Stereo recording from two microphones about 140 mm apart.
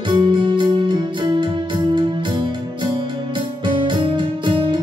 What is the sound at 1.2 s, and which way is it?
Music, 35° right (ahead or behind).